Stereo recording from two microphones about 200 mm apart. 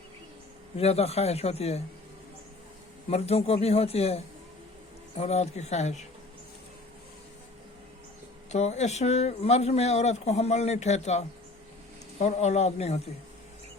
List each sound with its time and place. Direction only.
0.8 s speech: 30° left (ahead or behind)
3.1 s speech: 30° left (ahead or behind)
8.4 s speech: 35° left (ahead or behind)